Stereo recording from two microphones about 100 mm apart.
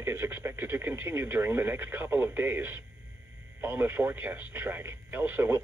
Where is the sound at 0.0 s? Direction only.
25° right (ahead or behind).